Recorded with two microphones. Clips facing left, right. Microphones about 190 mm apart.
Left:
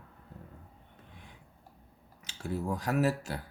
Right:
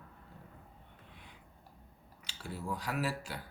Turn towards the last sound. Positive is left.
turn(degrees=45)  # may be behind; listen again after turning